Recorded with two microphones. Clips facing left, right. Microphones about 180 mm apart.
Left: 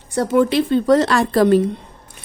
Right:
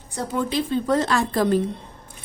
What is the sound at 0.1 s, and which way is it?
A woman's voice, 70° left (ahead or behind).